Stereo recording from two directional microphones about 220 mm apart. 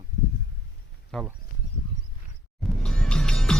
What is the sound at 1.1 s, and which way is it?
Speech, centre (ahead or behind).